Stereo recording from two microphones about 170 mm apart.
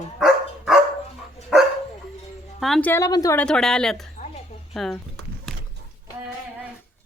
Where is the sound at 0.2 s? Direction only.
Centre (ahead or behind).